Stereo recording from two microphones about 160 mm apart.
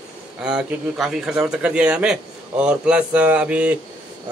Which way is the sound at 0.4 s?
5° right (ahead or behind).